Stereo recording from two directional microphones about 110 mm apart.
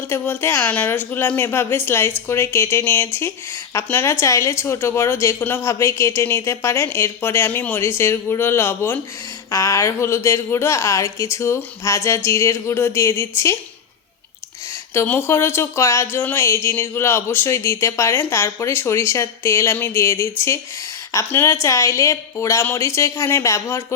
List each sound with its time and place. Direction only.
0.1 s speech: 20° left (ahead or behind)
14.9 s speech: 20° left (ahead or behind)